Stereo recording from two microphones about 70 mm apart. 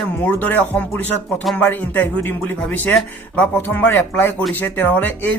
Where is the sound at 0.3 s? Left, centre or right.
Left.